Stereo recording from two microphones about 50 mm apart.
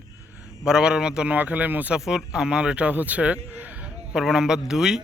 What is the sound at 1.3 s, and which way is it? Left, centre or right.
Speech, right.